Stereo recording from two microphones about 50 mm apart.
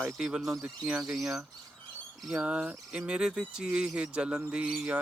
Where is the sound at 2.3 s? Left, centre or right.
Right.